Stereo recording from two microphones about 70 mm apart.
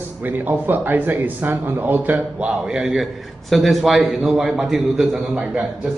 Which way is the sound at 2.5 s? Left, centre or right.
Centre.